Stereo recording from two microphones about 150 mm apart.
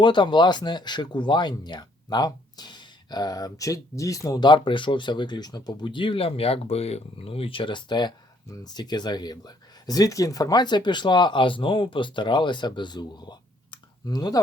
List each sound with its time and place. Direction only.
0.0 s speech: 30° left (ahead or behind)